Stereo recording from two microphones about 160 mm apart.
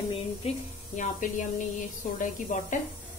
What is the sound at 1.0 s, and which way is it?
Speech, 55° left (ahead or behind).